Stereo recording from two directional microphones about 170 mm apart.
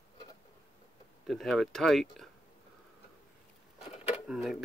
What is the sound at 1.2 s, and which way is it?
Speech, centre (ahead or behind).